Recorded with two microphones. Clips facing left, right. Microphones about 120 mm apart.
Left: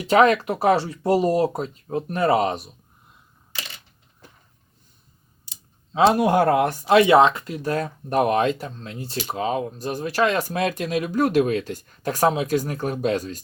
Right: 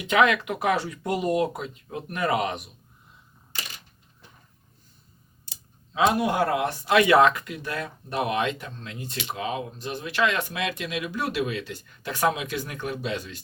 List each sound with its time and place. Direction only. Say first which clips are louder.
0.0 s speech: left 5 dB; 35° left (ahead or behind)
5.9 s speech: left 5 dB; 35° left (ahead or behind)
6.9 s speech: left 4 dB; 25° left (ahead or behind)